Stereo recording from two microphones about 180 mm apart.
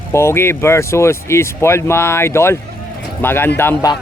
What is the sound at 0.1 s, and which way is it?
Speech, 15° left (ahead or behind).